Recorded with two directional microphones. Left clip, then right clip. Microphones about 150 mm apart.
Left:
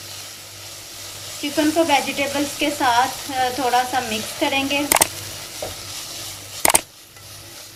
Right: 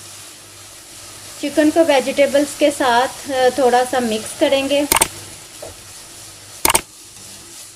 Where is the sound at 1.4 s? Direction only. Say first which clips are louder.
Right 5 dB; 30° right (ahead or behind).